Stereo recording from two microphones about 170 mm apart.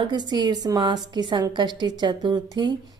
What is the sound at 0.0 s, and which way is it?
A woman's voice, 25° right (ahead or behind).